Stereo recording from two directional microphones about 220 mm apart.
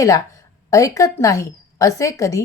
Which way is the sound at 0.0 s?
15° left (ahead or behind).